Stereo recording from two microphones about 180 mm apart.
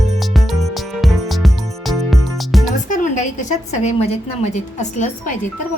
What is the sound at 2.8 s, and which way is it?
A woman's voice, 45° left (ahead or behind).